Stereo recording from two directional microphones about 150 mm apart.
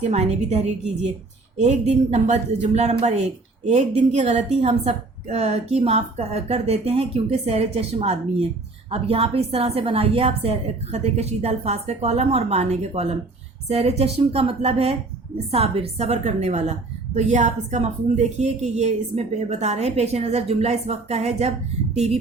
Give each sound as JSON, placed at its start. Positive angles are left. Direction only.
{"t": 0.0, "sound": "a woman's voice", "side_deg": -45}